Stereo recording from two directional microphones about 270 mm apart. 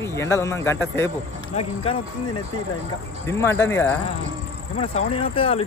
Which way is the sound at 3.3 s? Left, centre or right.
Centre.